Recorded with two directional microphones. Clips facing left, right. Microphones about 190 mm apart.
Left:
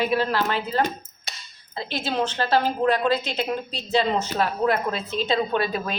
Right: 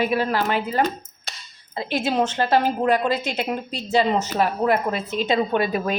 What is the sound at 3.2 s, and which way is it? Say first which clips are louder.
Speech: right 1 dB; 45° right (ahead or behind).